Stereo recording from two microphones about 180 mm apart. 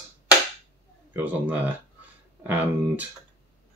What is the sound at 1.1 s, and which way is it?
Speech, 10° right (ahead or behind).